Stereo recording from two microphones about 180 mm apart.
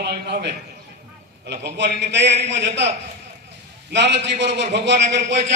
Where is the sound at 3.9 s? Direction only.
75° right (ahead or behind).